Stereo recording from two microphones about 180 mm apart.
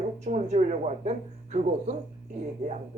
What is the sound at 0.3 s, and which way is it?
A man's voice, 40° right (ahead or behind).